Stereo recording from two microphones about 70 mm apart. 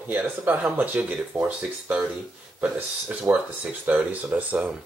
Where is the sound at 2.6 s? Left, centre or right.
Right.